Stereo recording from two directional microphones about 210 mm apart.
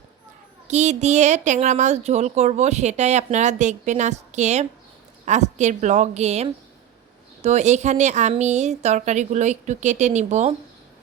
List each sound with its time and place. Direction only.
0.7 s speech: 35° right (ahead or behind)